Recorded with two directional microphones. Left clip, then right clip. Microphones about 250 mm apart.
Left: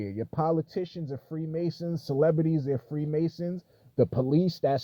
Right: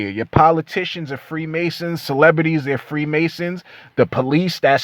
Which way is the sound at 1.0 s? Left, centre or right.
Right.